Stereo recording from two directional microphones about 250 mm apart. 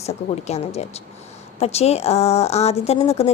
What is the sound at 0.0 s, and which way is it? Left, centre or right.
A woman's voice, left.